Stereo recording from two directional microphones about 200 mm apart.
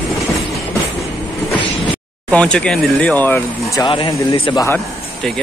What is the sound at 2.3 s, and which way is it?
Speech, 5° left (ahead or behind).